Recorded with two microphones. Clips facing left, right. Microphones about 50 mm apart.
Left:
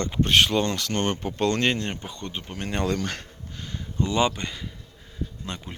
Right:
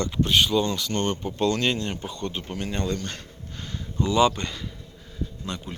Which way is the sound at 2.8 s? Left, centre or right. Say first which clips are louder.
Left 6 dB; left.